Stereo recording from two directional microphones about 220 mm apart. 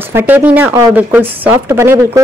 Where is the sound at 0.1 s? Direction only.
10° right (ahead or behind).